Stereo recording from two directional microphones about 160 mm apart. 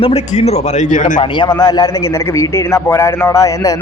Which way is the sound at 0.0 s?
40° left (ahead or behind).